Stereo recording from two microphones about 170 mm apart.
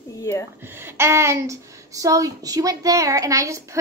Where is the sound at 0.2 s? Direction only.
15° left (ahead or behind).